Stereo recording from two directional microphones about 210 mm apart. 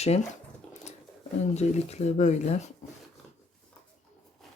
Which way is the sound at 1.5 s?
30° left (ahead or behind).